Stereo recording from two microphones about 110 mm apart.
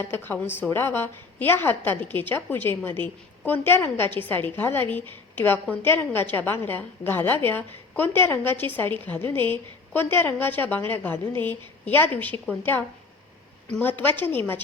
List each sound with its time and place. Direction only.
0.0 s a woman's voice: 20° left (ahead or behind)
13.8 s a woman's voice: 20° left (ahead or behind)